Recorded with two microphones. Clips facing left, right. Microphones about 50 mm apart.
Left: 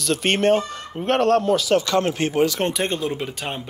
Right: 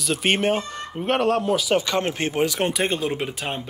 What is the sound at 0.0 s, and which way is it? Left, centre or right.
Speech, centre.